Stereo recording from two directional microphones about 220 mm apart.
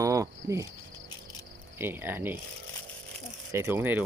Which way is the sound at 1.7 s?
10° right (ahead or behind).